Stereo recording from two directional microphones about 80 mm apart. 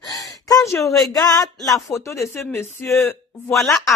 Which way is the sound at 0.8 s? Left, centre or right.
Centre.